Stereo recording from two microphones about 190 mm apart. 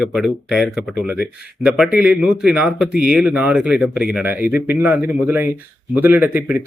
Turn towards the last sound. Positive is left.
turn(degrees=-10)  # may be behind; listen again after turning